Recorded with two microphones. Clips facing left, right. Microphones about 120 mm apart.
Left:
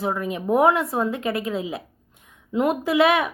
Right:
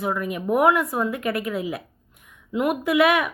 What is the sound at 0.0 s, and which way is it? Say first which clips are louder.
A woman's voice: even; 30° left (ahead or behind).